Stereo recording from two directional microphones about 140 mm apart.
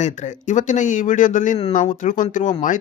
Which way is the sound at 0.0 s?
60° left (ahead or behind).